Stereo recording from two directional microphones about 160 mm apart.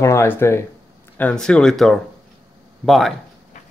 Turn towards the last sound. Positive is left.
turn(degrees=0)  # may be behind; listen again after turning